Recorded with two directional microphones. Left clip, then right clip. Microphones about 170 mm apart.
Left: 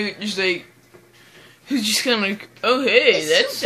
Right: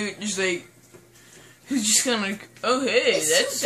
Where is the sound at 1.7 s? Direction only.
15° left (ahead or behind).